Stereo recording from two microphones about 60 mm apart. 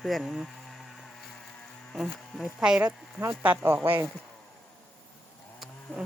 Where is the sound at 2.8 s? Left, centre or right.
Right.